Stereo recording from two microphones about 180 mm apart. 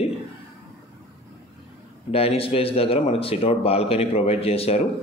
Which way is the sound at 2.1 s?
35° left (ahead or behind).